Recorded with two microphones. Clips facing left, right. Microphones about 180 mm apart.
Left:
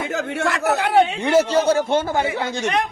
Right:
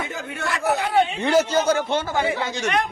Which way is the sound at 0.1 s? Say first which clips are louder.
Left 6 dB; 85° left.